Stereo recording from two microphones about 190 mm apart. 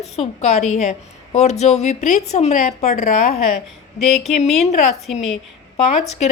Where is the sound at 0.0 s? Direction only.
35° left (ahead or behind).